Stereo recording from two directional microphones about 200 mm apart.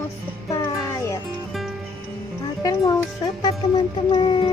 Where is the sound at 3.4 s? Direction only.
20° left (ahead or behind).